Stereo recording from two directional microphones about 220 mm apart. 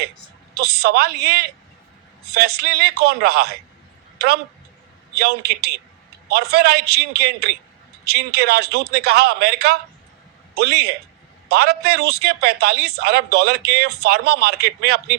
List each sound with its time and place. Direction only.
0.6 s a man's voice: 50° right (ahead or behind)
5.1 s a man's voice: 45° right (ahead or behind)